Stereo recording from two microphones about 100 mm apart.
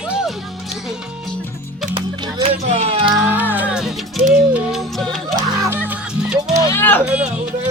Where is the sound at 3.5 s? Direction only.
15° right (ahead or behind).